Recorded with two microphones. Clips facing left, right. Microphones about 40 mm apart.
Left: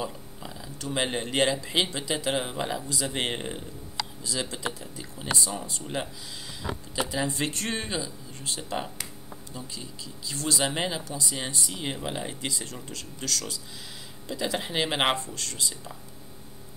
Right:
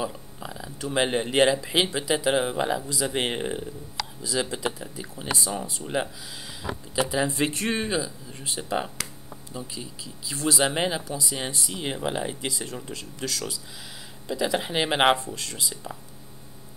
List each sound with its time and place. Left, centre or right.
0.0 s speech: centre
7.1 s speech: centre